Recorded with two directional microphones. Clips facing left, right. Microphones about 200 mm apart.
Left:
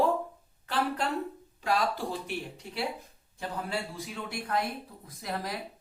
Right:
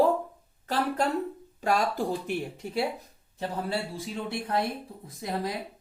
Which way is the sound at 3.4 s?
30° right (ahead or behind).